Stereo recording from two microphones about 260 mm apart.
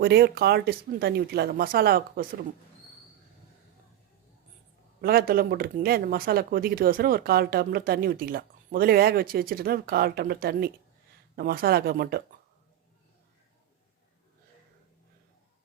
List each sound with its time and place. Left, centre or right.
0.0 s speech: right
4.9 s speech: right